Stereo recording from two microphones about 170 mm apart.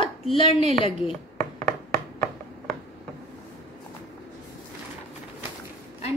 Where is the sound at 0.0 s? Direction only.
35° left (ahead or behind).